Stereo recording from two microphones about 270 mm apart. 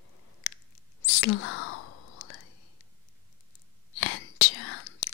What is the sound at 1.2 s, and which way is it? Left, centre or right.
Whispering, left.